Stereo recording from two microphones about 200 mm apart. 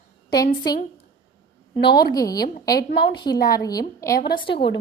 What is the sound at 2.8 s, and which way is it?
Speech, 55° left (ahead or behind).